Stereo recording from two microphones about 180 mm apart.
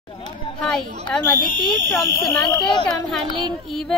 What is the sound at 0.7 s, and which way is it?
Speech, 5° left (ahead or behind).